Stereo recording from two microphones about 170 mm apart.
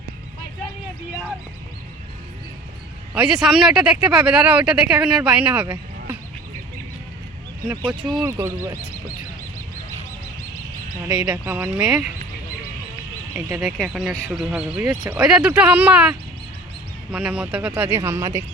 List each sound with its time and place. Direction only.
3.2 s speech: 5° right (ahead or behind)
8.0 s speech: centre (ahead or behind)
8.3 s speech: 15° right (ahead or behind)
11.3 s speech: 10° right (ahead or behind)
13.3 s speech: 20° right (ahead or behind)
13.7 s speech: centre (ahead or behind); by 18.4 s 20° right (ahead or behind)